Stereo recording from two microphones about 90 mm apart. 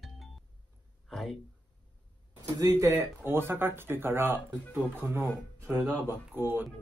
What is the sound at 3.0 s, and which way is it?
Speech, 25° right (ahead or behind).